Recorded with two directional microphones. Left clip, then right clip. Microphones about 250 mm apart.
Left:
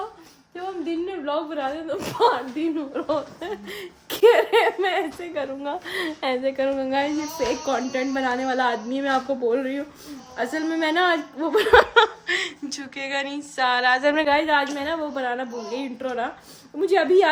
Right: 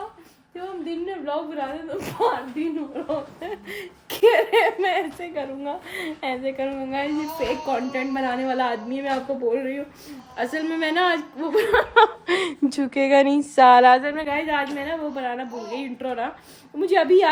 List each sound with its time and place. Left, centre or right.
1.2 s a woman's voice: centre
12.2 s speech: centre
14.0 s speech: centre